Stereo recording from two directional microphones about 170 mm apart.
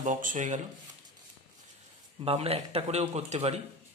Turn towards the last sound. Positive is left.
turn(degrees=-40)  # may be behind; listen again after turning